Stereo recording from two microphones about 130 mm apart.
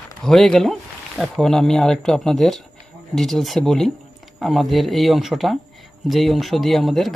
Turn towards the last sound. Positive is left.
turn(degrees=0)  # may be behind; listen again after turning